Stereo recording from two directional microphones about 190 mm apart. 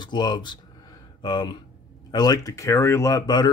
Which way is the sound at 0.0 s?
25° left (ahead or behind).